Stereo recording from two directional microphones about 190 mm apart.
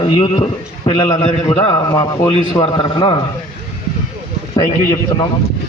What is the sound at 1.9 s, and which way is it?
A man's voice, 20° left (ahead or behind).